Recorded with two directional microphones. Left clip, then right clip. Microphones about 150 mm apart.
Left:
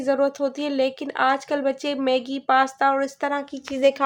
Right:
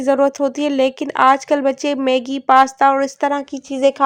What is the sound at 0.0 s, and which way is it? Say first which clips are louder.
Speech: right 6 dB; 45° right (ahead or behind).